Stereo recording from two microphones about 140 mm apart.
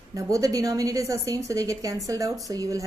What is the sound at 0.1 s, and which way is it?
A woman's voice, 25° right (ahead or behind).